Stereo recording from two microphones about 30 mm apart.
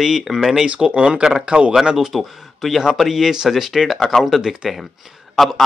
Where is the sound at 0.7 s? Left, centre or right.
Right.